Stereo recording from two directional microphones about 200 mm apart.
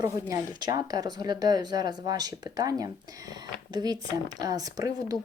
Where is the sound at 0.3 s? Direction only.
15° right (ahead or behind).